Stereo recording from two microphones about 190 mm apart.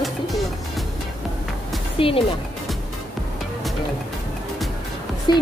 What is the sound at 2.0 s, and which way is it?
Speech, 30° left (ahead or behind).